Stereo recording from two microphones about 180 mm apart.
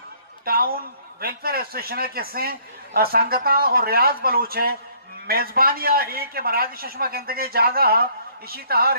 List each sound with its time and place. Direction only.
0.5 s a man's voice: 55° right (ahead or behind)